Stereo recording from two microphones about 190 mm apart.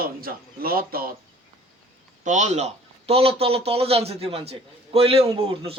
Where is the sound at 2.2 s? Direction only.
40° right (ahead or behind).